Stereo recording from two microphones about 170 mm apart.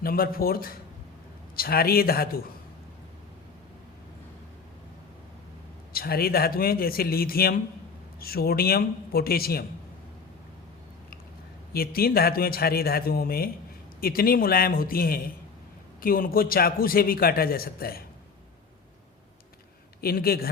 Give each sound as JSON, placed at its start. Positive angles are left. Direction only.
{"t": 0.0, "sound": "a man's voice", "side_deg": 60}
{"t": 5.9, "sound": "a man's voice", "side_deg": 60}
{"t": 11.7, "sound": "a man's voice", "side_deg": 60}
{"t": 20.0, "sound": "a man's voice", "side_deg": 65}